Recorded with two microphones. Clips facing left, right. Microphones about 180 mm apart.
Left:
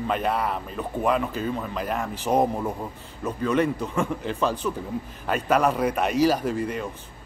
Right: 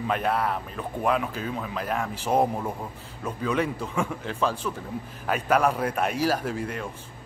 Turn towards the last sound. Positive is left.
turn(degrees=0)  # may be behind; listen again after turning